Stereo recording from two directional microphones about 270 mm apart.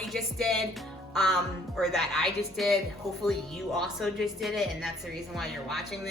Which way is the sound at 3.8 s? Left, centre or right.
Centre.